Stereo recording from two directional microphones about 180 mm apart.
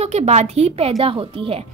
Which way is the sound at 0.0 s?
35° right (ahead or behind).